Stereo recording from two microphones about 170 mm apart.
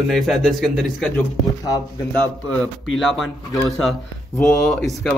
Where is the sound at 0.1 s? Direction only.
Centre (ahead or behind).